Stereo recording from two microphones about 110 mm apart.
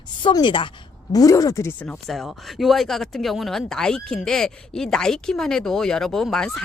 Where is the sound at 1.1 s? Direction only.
30° left (ahead or behind).